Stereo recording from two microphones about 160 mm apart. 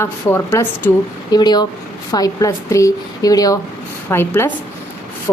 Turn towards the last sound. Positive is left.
turn(degrees=15)  # may be behind; listen again after turning